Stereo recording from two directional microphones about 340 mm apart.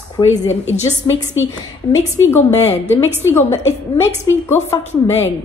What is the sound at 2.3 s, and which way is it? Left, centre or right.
Speech, centre.